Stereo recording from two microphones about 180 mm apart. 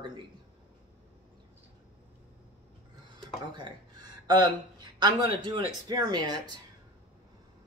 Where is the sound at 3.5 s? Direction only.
25° right (ahead or behind).